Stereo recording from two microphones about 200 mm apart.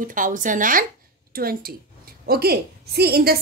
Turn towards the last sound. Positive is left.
turn(degrees=-50)  # may be behind; listen again after turning